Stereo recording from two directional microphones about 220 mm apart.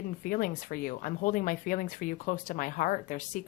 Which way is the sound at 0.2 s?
40° left (ahead or behind).